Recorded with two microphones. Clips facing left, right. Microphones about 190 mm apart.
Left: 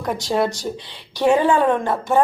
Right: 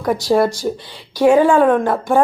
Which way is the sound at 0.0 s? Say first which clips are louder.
Right 5 dB; 10° right (ahead or behind).